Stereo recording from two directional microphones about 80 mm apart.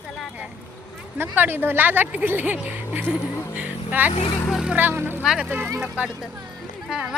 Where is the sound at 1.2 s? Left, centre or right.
Right.